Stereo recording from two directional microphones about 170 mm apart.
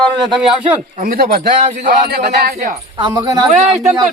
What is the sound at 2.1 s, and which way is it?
Speech, 65° right (ahead or behind).